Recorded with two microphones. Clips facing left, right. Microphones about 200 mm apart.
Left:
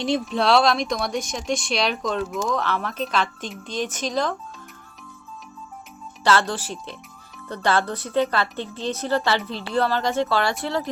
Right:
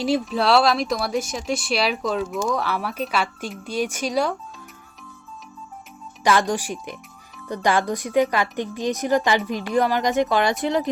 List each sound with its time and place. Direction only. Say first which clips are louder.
0.0 s speech: right 1 dB; 5° right (ahead or behind)
6.2 s speech: right 1 dB; 15° right (ahead or behind)